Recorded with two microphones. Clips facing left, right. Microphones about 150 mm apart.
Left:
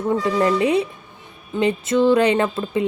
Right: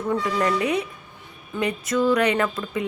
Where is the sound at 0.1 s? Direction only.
25° left (ahead or behind).